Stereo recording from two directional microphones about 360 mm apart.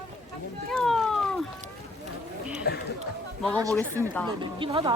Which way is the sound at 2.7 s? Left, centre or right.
Left.